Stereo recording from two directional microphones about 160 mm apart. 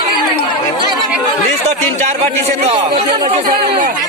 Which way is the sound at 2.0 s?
45° right (ahead or behind).